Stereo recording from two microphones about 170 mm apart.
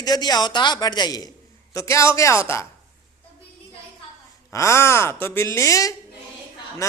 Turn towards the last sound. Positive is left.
turn(degrees=20)  # may be behind; listen again after turning